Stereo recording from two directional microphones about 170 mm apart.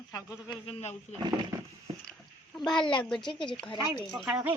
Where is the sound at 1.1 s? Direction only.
25° right (ahead or behind).